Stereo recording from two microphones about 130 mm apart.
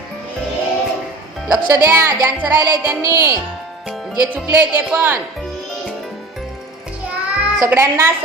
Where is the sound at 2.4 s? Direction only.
15° right (ahead or behind).